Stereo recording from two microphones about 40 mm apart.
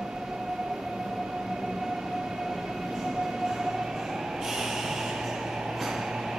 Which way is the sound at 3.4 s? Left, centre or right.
Centre.